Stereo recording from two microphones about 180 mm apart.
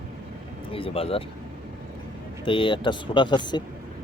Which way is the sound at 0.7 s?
30° left (ahead or behind).